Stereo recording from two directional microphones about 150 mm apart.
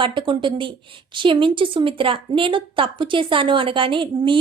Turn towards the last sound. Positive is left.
turn(degrees=-35)  # may be behind; listen again after turning